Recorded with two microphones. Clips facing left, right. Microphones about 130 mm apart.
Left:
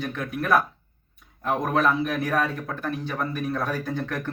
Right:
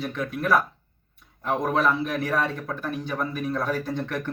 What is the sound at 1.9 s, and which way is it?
Speech, 5° left (ahead or behind).